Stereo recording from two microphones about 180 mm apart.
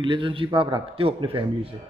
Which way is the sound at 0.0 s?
25° right (ahead or behind).